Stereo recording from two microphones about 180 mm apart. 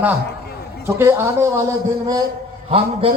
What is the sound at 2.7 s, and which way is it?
Speech, 30° right (ahead or behind).